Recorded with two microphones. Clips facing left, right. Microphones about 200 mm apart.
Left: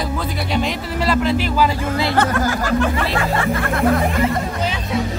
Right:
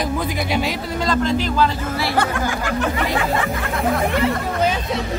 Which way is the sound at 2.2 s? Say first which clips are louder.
Left 2 dB; 15° right (ahead or behind).